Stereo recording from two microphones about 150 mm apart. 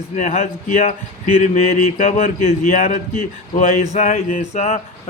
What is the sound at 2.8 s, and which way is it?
Speech, 60° left (ahead or behind).